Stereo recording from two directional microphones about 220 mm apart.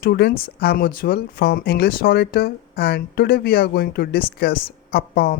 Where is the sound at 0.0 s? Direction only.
45° left (ahead or behind).